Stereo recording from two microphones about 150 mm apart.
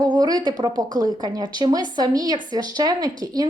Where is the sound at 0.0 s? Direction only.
25° right (ahead or behind).